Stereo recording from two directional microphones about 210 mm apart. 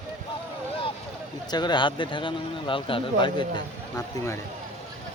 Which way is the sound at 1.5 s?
20° left (ahead or behind).